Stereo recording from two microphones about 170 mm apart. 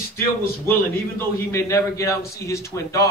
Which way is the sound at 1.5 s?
15° left (ahead or behind).